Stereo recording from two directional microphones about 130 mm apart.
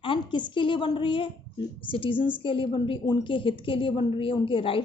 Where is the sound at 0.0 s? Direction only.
40° left (ahead or behind).